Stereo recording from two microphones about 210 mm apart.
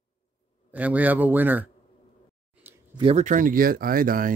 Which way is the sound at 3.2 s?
40° right (ahead or behind).